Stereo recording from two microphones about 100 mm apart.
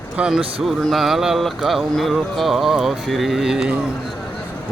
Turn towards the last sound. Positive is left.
turn(degrees=-5)  # may be behind; listen again after turning